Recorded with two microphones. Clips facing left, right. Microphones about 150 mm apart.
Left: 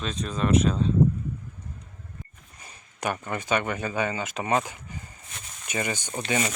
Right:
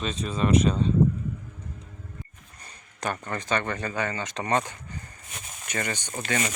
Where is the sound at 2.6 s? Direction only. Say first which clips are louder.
Left 2 dB; 10° left (ahead or behind).